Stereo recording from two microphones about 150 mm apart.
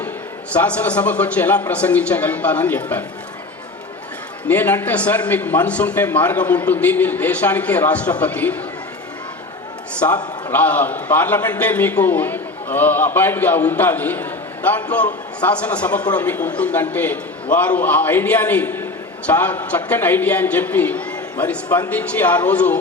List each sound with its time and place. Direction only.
0.5 s a man's voice: 10° left (ahead or behind)
4.4 s a man's voice: 10° left (ahead or behind)
10.0 s a man's voice: 15° left (ahead or behind)